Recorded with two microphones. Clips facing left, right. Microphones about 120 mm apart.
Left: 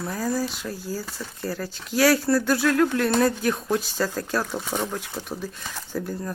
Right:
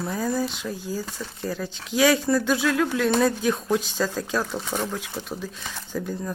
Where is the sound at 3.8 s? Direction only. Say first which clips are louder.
Even; 10° left (ahead or behind).